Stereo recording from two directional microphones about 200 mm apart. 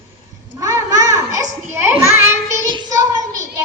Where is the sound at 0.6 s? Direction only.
15° right (ahead or behind).